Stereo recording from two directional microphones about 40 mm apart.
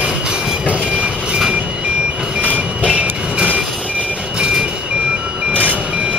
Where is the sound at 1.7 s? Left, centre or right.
Right.